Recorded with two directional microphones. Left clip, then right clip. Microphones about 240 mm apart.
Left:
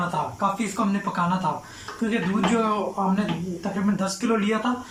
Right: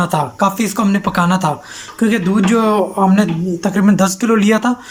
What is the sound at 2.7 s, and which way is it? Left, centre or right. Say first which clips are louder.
Speech: right 11 dB; right.